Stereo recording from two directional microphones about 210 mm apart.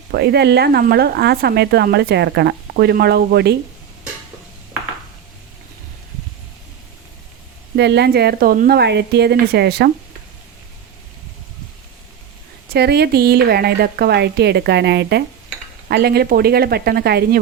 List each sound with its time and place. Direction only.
0.1 s speech: 50° right (ahead or behind)
7.8 s speech: 55° right (ahead or behind)
12.7 s speech: 50° right (ahead or behind)